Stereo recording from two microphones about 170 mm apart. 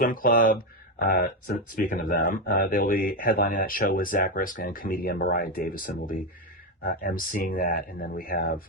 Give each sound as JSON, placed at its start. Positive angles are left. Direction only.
{"t": 0.0, "sound": "speech", "side_deg": 55}